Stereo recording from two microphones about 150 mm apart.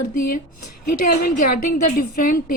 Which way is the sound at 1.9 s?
70° left (ahead or behind).